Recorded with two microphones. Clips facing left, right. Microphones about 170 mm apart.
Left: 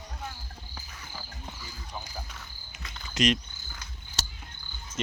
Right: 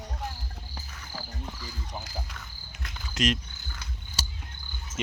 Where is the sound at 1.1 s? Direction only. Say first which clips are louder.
Right 5 dB; 35° right (ahead or behind).